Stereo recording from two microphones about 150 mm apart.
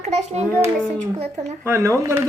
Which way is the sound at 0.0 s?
45° right (ahead or behind).